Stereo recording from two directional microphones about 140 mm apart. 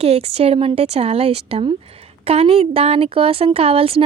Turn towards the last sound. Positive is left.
turn(degrees=-40)  # may be behind; listen again after turning